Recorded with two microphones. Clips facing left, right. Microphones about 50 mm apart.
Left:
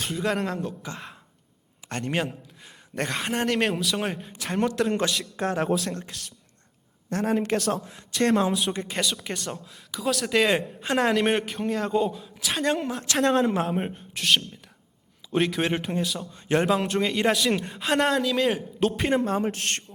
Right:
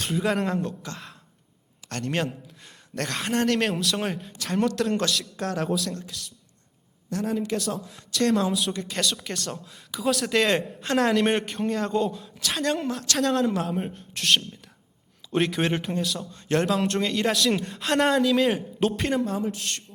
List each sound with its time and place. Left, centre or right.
0.0 s speech: centre
1.9 s a man's voice: centre
7.3 s a man's voice: left
8.1 s a woman's voice: left
9.2 s speech: centre
13.5 s a woman's voice: left
14.1 s speech: centre
19.2 s speech: left